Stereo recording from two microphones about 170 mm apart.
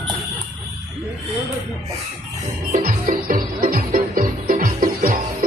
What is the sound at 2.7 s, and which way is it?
Music, 50° right (ahead or behind).